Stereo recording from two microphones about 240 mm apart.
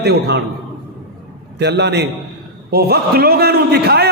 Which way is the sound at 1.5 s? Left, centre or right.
Right.